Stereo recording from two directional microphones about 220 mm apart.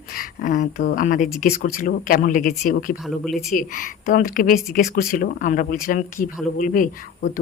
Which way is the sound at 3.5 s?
40° left (ahead or behind).